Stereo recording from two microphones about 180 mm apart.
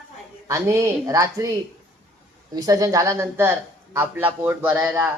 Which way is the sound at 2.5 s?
20° right (ahead or behind).